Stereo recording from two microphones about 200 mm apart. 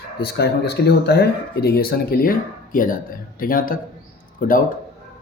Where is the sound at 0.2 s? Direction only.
55° left (ahead or behind).